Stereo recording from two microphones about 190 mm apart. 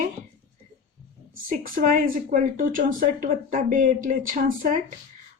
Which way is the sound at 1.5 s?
45° right (ahead or behind).